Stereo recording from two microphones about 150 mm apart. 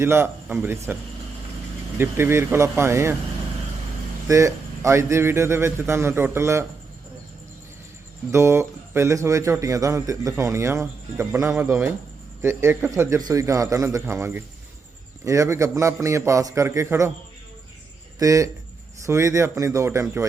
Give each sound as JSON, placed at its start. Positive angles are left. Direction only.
{"t": 0.0, "sound": "a man's voice", "side_deg": -15}
{"t": 2.0, "sound": "a man's voice", "side_deg": -15}
{"t": 4.3, "sound": "a man's voice", "side_deg": -20}
{"t": 8.3, "sound": "a man's voice", "side_deg": -20}
{"t": 18.2, "sound": "speech", "side_deg": -20}